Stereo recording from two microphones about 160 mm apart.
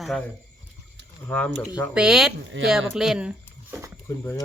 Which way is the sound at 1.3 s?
10° left (ahead or behind).